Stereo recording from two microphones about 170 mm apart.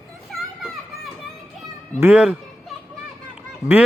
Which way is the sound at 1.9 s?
15° right (ahead or behind).